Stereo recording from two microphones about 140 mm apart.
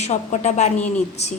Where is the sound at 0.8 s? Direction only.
10° left (ahead or behind).